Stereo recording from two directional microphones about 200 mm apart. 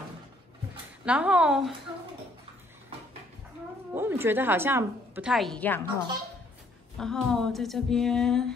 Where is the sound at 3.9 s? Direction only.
10° right (ahead or behind); by 5.8 s 10° left (ahead or behind).